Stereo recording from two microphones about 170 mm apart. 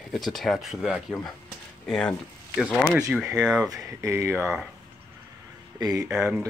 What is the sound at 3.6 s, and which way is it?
Speech, 20° right (ahead or behind).